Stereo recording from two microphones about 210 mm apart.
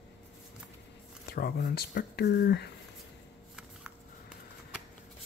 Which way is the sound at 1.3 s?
45° left (ahead or behind).